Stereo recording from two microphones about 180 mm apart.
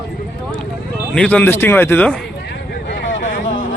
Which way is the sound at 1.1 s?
5° left (ahead or behind).